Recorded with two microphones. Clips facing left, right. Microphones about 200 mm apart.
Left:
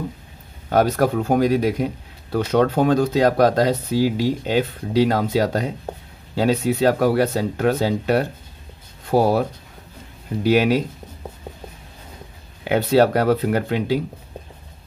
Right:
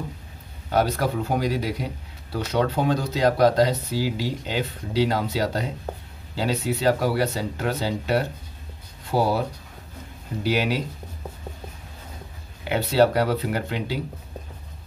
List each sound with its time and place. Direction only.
0.7 s speech: 50° left (ahead or behind)
10.4 s speech: 50° left (ahead or behind)
12.6 s speech: 50° left (ahead or behind)